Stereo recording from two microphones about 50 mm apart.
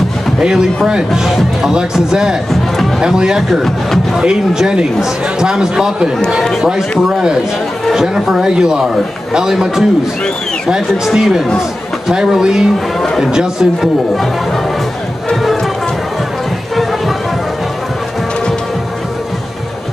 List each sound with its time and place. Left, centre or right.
0.4 s speech: centre
1.2 s speech: centre
1.7 s speech: centre
3.6 s speech: centre
4.2 s speech: centre
11.1 s speech: centre